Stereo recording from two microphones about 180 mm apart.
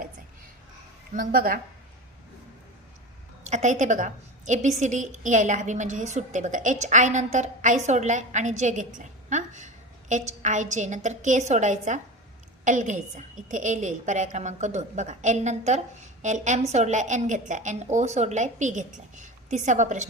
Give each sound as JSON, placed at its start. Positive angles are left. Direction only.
{"t": 1.1, "sound": "a woman's voice", "side_deg": -50}
{"t": 3.4, "sound": "a woman's voice", "side_deg": -40}